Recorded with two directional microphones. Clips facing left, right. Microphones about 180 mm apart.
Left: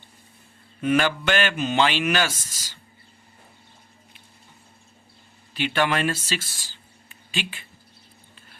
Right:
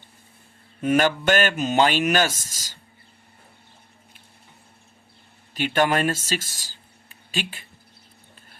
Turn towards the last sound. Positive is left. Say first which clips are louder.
# right 1 dB
turn(degrees=-40)  # may be behind; listen again after turning